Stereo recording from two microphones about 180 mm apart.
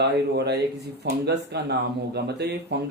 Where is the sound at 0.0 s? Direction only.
70° right (ahead or behind).